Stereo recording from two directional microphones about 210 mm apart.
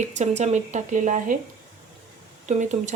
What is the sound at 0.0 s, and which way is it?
Speech, 35° right (ahead or behind).